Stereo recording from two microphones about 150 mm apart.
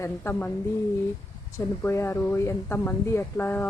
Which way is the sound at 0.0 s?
15° left (ahead or behind).